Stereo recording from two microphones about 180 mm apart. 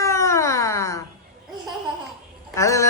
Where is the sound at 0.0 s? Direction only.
15° left (ahead or behind).